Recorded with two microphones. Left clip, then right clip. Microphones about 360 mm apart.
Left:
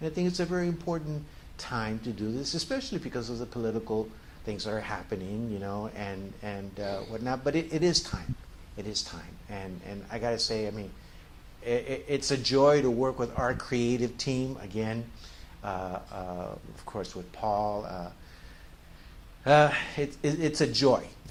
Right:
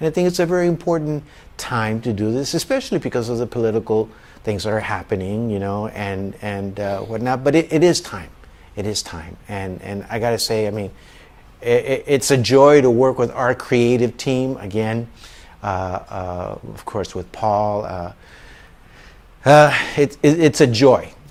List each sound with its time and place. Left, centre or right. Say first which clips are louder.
0.0 s speech: right 13 dB; right
4.4 s speech: right 13 dB; right
8.7 s speech: right 10 dB; right
15.6 s speech: right 12 dB; right
19.5 s speech: right 11 dB; right